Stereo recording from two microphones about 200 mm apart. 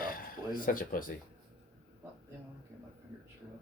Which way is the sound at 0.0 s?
45° left (ahead or behind).